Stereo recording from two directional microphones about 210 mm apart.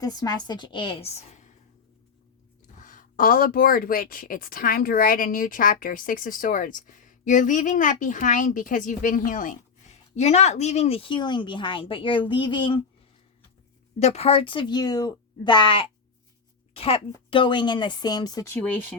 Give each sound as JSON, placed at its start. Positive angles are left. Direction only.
{"t": 0.0, "sound": "a woman's voice", "side_deg": 15}
{"t": 2.7, "sound": "speech", "side_deg": 40}
{"t": 14.0, "sound": "a woman's voice", "side_deg": 30}